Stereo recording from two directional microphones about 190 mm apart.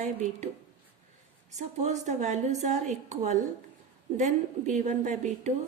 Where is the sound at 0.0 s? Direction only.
40° right (ahead or behind).